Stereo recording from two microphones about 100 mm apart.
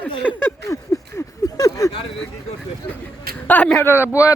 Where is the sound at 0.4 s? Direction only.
35° left (ahead or behind).